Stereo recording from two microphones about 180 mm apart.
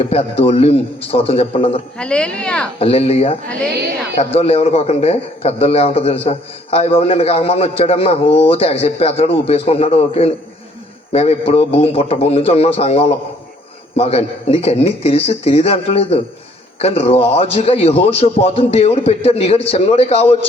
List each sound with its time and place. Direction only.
0.0 s a man's voice: 35° left (ahead or behind)
2.0 s speech: 5° left (ahead or behind)
2.7 s a man's voice: 35° left (ahead or behind)